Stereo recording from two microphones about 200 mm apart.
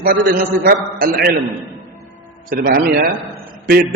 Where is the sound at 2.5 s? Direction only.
45° right (ahead or behind).